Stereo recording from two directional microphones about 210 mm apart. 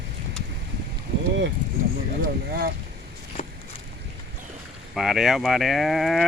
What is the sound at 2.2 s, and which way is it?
Speech, 50° right (ahead or behind).